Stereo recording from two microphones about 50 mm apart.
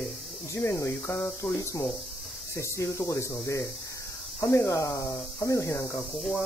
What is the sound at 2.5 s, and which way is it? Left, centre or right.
Speech, left.